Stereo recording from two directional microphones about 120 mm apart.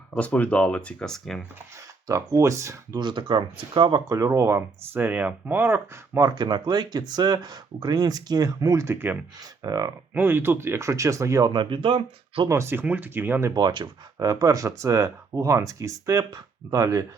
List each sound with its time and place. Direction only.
0.1 s speech: 10° left (ahead or behind)
2.0 s speech: 25° right (ahead or behind)
3.0 s speech: 40° right (ahead or behind); by 6.2 s 20° right (ahead or behind)
6.2 s speech: 40° right (ahead or behind); by 9.2 s 15° right (ahead or behind)
9.6 s speech: 30° right (ahead or behind)
10.2 s speech: 20° right (ahead or behind)
11.5 s speech: 45° right (ahead or behind)
12.5 s speech: 20° right (ahead or behind)
13.5 s speech: 35° right (ahead or behind)